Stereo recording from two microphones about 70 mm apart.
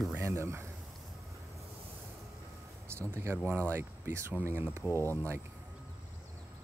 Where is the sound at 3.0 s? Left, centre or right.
Right.